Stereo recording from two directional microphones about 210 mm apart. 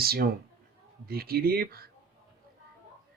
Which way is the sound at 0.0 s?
45° right (ahead or behind).